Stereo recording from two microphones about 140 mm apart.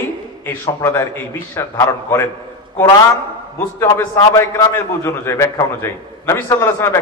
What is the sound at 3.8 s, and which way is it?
A man's voice, 20° left (ahead or behind).